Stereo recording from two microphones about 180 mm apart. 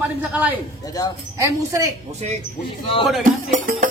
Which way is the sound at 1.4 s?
15° right (ahead or behind).